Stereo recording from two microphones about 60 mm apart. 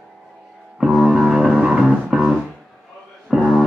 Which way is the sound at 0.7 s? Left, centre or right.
Centre.